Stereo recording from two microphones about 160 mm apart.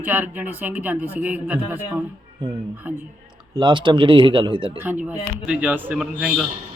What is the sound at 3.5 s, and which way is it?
Speech, 30° right (ahead or behind).